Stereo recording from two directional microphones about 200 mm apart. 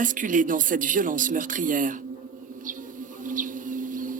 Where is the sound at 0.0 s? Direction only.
40° right (ahead or behind).